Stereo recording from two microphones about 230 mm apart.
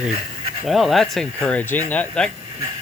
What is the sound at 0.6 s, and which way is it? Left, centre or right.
Speech, centre.